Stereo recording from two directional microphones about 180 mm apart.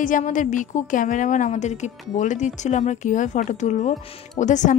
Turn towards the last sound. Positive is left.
turn(degrees=45)  # may be behind; listen again after turning